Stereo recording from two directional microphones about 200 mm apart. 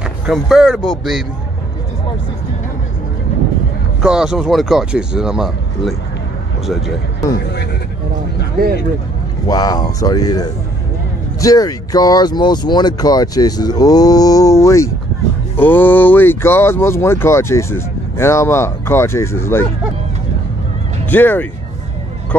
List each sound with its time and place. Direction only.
0.3 s speech: centre (ahead or behind)
4.0 s speech: 5° right (ahead or behind)
8.6 s speech: 50° right (ahead or behind)
9.5 s speech: 20° left (ahead or behind)
21.1 s speech: 10° left (ahead or behind)